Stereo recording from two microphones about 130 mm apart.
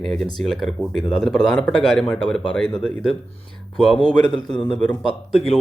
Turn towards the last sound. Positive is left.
turn(degrees=5)  # may be behind; listen again after turning